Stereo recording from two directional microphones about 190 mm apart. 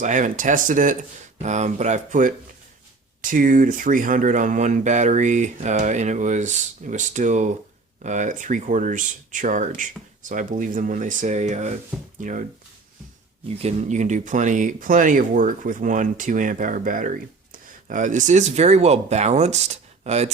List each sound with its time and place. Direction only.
0.0 s speech: 40° right (ahead or behind)
13.6 s speech: 35° right (ahead or behind)